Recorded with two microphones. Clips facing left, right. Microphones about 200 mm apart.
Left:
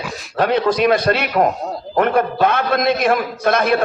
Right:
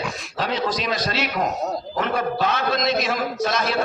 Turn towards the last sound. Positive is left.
turn(degrees=55)  # may be behind; listen again after turning